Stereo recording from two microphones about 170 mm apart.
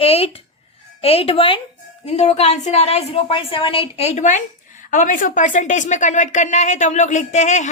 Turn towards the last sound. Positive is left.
turn(degrees=45)  # may be behind; listen again after turning